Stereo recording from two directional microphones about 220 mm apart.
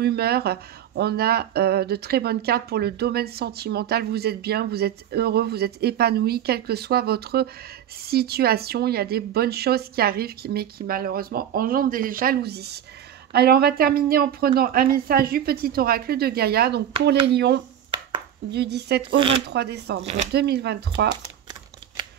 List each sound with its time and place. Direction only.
0.0 s speech: 45° right (ahead or behind)
19.1 s speech: 25° right (ahead or behind)
19.5 s speech: 50° right (ahead or behind)
20.0 s speech: 30° right (ahead or behind)
20.3 s speech: 50° right (ahead or behind)
21.2 s typewriter: 20° right (ahead or behind)